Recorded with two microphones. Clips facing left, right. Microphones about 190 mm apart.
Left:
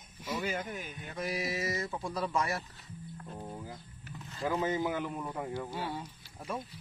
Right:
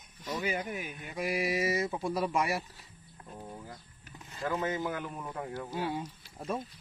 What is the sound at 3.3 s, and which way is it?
Music, 5° left (ahead or behind).